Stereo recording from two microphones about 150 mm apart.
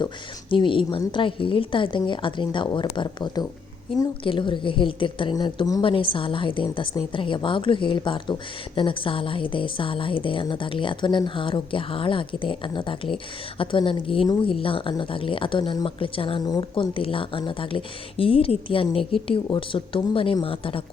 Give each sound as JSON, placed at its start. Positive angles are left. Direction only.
{"t": 0.5, "sound": "a woman's voice", "side_deg": 35}